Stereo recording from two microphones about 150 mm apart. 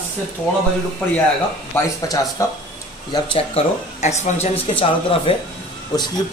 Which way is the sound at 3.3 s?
45° left (ahead or behind).